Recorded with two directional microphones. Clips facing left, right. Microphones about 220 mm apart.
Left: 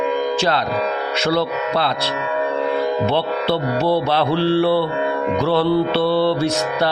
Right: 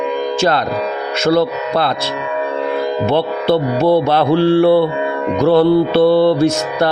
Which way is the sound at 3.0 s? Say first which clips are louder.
Right 4 dB; 50° right (ahead or behind).